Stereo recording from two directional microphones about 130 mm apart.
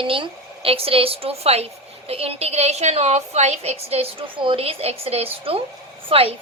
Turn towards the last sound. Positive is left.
turn(degrees=-45)  # may be behind; listen again after turning